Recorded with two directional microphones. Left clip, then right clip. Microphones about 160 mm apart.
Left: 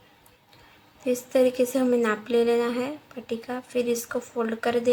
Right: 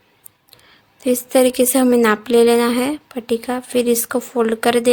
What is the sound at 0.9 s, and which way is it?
A woman's voice, 90° right.